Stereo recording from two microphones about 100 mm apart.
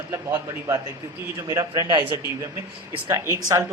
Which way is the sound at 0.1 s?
35° right (ahead or behind).